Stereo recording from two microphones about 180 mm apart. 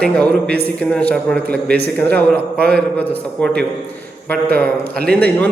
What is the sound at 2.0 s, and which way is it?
A man's voice, 10° left (ahead or behind).